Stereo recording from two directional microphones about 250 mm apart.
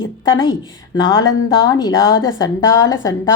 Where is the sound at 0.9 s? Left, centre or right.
Centre.